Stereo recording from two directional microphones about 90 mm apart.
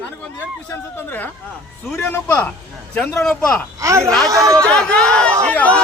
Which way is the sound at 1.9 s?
25° left (ahead or behind).